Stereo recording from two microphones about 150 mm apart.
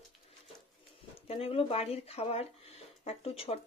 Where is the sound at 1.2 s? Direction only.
40° left (ahead or behind).